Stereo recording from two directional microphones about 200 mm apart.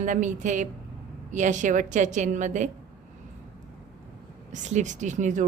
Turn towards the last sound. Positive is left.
turn(degrees=-40)  # may be behind; listen again after turning